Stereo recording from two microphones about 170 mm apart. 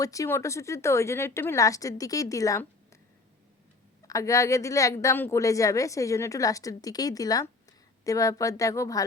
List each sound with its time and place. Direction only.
0.0 s speech: 20° left (ahead or behind)
4.0 s a woman's voice: 20° left (ahead or behind)